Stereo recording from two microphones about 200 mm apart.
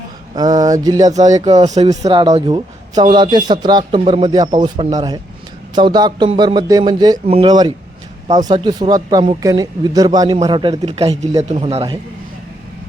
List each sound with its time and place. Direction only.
0.3 s speech: 20° right (ahead or behind)
1.1 s speech: 35° right (ahead or behind)
1.8 s speech: 20° right (ahead or behind)